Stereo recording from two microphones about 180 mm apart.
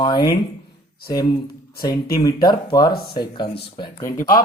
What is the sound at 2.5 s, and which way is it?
Speech, 25° left (ahead or behind).